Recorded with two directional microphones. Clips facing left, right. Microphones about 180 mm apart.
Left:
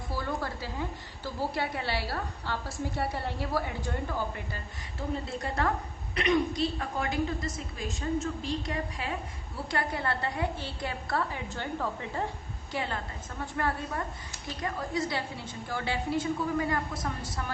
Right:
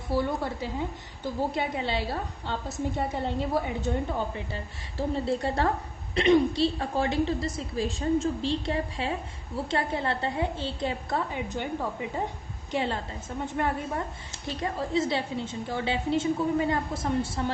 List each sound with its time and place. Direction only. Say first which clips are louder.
0.2 s a woman's voice: right 3 dB; 20° right (ahead or behind)
12.7 s a woman's voice: right 5 dB; 25° right (ahead or behind)